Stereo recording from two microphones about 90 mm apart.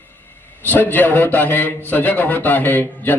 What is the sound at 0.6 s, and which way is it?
A man's voice, 20° left (ahead or behind).